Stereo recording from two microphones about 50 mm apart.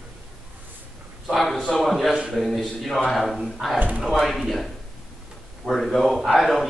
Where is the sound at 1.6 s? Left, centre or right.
Centre.